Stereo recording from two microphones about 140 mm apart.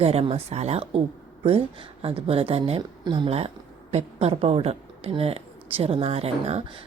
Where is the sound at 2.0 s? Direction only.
45° right (ahead or behind).